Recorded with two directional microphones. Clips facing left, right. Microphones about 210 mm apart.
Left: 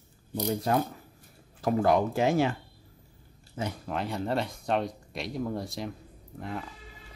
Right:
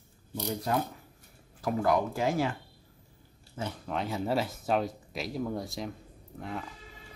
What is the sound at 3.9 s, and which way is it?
Speech, centre (ahead or behind).